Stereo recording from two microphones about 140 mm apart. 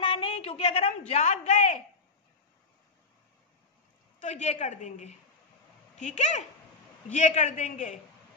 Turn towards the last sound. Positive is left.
turn(degrees=65)  # may be behind; listen again after turning